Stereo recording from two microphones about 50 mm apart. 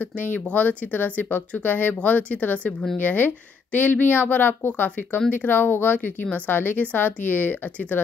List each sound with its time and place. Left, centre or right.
0.0 s speech: left